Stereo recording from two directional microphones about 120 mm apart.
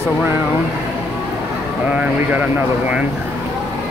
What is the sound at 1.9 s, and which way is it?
Speech, 10° right (ahead or behind).